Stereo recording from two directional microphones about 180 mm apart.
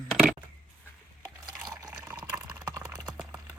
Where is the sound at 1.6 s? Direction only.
20° right (ahead or behind).